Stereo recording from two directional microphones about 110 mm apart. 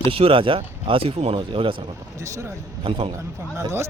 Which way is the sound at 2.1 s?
30° right (ahead or behind).